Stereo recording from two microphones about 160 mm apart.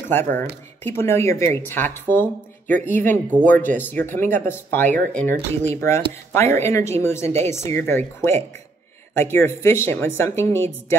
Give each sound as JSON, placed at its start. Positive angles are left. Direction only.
{"t": 0.1, "sound": "speech", "side_deg": 15}